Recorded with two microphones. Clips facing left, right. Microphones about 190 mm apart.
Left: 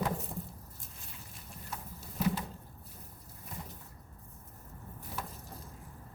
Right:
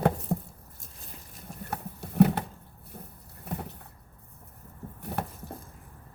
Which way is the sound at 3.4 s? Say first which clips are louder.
Right 10 dB; 65° right (ahead or behind).